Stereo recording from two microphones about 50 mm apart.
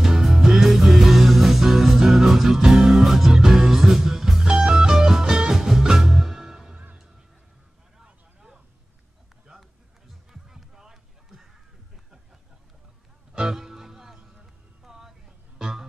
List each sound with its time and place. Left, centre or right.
0.0 s music: centre
6.7 s music: right
8.0 s vehicle: centre
9.5 s music: centre
13.3 s music: centre